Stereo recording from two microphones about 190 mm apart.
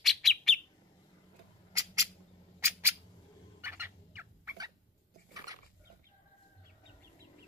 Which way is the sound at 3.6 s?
10° right (ahead or behind).